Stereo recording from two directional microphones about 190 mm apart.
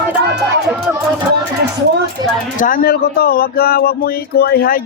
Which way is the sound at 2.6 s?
50° left (ahead or behind).